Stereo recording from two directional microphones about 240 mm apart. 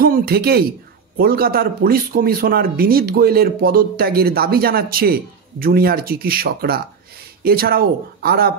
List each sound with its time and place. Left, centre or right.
0.0 s a man's voice: right